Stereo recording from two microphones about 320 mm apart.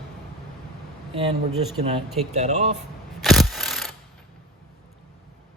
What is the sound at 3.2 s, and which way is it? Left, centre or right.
Mechanisms, centre.